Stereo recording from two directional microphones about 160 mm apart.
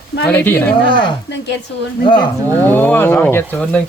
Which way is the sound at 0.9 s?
30° left (ahead or behind).